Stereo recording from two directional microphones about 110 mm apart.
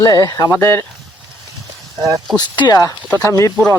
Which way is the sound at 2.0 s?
30° right (ahead or behind).